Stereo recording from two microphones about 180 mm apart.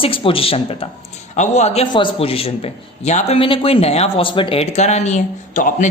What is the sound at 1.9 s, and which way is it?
A man's voice, 25° left (ahead or behind).